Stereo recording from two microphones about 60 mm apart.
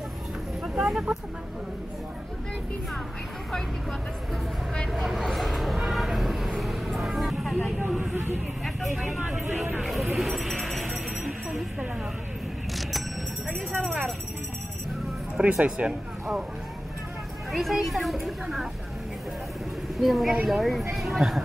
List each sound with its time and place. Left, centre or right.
0.7 s a sound: centre
4.9 s vehicle: centre
8.1 s speech: right
9.8 s speech: centre
10.1 s music: centre
13.7 s speech: right
15.3 s speech: centre
17.5 s speech: centre
20.0 s speech: centre